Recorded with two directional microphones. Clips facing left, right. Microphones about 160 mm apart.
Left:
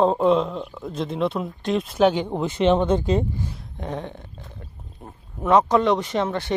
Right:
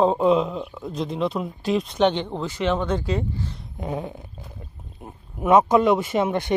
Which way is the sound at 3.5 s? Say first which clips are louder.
Right 1 dB; 5° right (ahead or behind).